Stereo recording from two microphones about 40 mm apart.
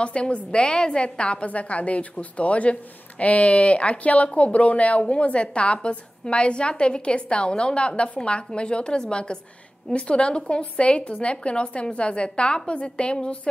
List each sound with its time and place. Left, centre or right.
0.0 s a woman's voice: left